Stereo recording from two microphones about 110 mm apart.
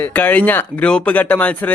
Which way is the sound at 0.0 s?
15° left (ahead or behind).